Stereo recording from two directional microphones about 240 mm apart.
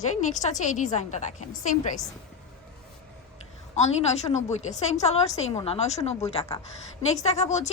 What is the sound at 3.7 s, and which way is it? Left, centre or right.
A woman's voice, left.